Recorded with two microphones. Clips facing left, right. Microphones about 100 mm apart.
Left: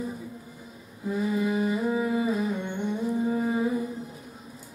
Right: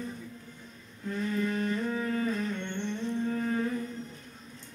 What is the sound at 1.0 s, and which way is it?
Music, 10° left (ahead or behind).